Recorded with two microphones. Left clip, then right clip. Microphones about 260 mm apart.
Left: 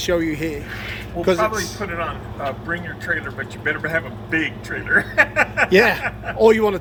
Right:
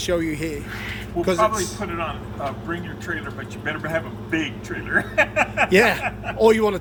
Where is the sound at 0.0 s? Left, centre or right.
Centre.